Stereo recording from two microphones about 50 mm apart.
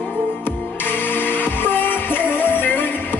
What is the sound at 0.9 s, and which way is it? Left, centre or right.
Music, left.